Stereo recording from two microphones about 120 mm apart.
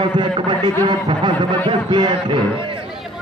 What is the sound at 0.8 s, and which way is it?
A man's voice, 40° right (ahead or behind).